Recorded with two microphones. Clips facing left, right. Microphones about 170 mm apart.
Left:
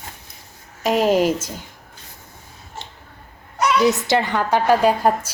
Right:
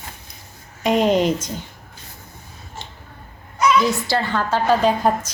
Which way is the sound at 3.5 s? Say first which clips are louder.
Even; 70° left (ahead or behind).